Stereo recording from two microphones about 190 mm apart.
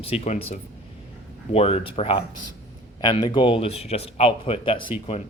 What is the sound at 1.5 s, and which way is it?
Speech, 30° left (ahead or behind).